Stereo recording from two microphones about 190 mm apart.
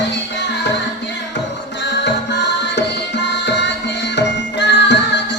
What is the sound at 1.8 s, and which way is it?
Music, 65° left (ahead or behind).